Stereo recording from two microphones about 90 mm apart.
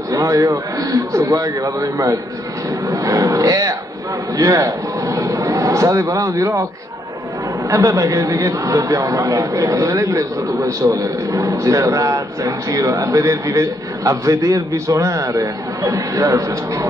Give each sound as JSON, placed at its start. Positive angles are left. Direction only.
{"t": 0.1, "sound": "a man's voice", "side_deg": -40}
{"t": 2.9, "sound": "roaring cats", "side_deg": -35}
{"t": 4.4, "sound": "a man's voice", "side_deg": -40}
{"t": 7.7, "sound": "a man's voice", "side_deg": -35}